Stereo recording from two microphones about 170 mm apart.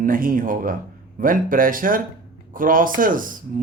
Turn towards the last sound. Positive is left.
turn(degrees=-55)  # may be behind; listen again after turning